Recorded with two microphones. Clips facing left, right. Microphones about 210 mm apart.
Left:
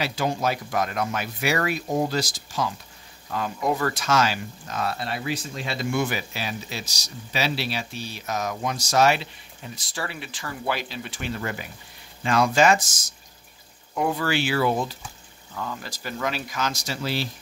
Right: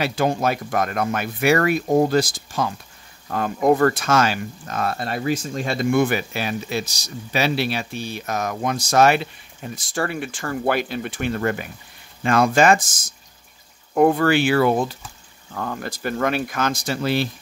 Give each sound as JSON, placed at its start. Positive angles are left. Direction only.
{"t": 0.0, "sound": "speech", "side_deg": -55}